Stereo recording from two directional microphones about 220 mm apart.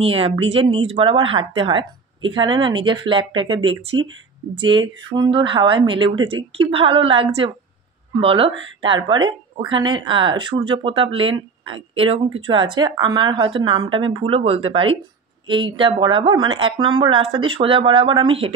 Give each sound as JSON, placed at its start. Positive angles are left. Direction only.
{"t": 0.0, "sound": "speech", "side_deg": -25}